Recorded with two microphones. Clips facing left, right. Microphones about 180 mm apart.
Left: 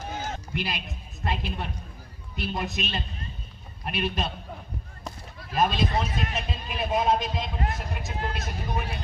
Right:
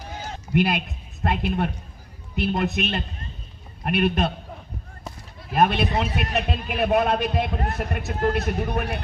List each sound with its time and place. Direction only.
0.5 s a man's voice: 55° right (ahead or behind)
5.5 s a man's voice: 60° right (ahead or behind)